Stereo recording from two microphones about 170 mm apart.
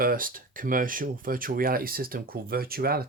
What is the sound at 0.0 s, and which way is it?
Speech, 55° right (ahead or behind).